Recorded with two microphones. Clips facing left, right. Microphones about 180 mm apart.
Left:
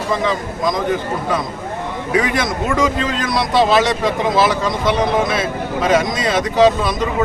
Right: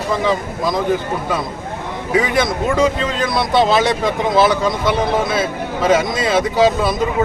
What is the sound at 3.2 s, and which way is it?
Speech, centre (ahead or behind).